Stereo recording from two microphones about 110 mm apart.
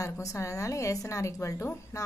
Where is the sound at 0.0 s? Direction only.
30° left (ahead or behind).